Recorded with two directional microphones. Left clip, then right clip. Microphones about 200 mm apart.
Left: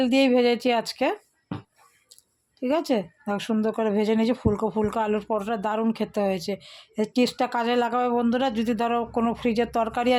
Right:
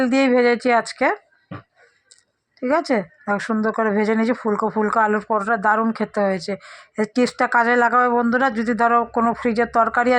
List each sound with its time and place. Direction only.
0.0 s speech: centre (ahead or behind)
2.6 s speech: centre (ahead or behind)